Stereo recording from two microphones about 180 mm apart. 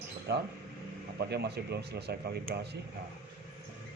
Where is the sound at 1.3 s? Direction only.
65° right (ahead or behind).